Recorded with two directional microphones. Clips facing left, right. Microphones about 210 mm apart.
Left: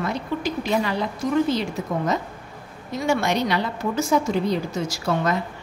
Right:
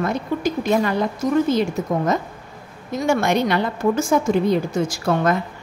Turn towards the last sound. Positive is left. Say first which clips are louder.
# right 4 dB
turn(degrees=-50)  # may be behind; listen again after turning